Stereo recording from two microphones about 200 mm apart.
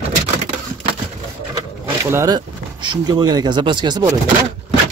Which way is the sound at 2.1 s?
15° right (ahead or behind).